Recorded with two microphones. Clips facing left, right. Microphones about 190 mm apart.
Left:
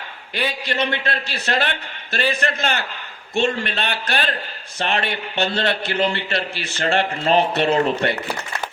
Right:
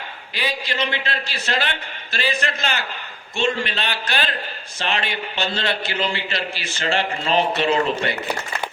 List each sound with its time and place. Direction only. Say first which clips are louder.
0.3 s a man's voice: left 2 dB; 55° left (ahead or behind)